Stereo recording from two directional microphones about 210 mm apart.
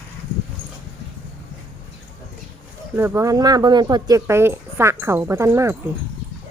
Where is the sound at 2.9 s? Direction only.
15° right (ahead or behind).